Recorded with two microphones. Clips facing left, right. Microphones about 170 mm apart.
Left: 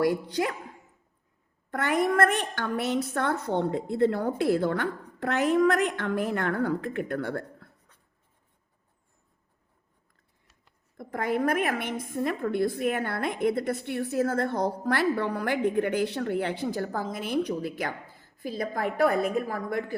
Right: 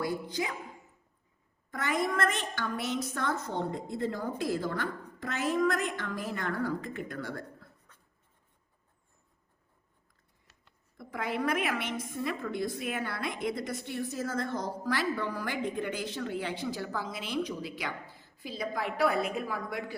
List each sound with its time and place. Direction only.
0.0 s a woman's voice: 70° left (ahead or behind)
1.7 s a woman's voice: 65° left (ahead or behind)
10.9 s a woman's voice: 50° left (ahead or behind)